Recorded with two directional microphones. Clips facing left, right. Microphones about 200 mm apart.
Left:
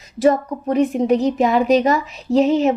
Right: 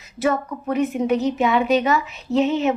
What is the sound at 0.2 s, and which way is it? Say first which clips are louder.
A woman's voice: left 6 dB; 35° left (ahead or behind).